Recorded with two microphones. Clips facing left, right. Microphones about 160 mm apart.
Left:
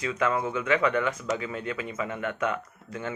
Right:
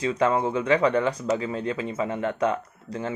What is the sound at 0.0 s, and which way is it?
Speech, 35° right (ahead or behind).